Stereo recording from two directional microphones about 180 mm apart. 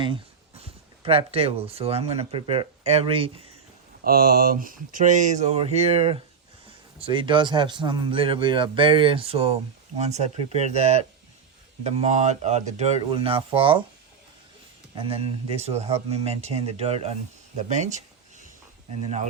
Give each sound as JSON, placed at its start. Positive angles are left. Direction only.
{"t": 0.0, "sound": "speech", "side_deg": -30}
{"t": 4.0, "sound": "a man's voice", "side_deg": -55}
{"t": 14.9, "sound": "speech", "side_deg": -30}
{"t": 17.6, "sound": "a sound", "side_deg": -40}